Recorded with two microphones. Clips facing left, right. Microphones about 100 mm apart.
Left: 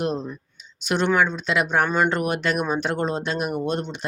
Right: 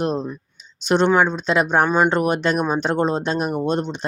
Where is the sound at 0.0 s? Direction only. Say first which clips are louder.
Right 3 dB; 30° right (ahead or behind).